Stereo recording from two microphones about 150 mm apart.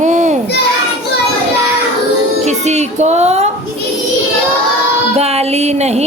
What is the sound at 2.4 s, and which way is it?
Speech, 50° right (ahead or behind).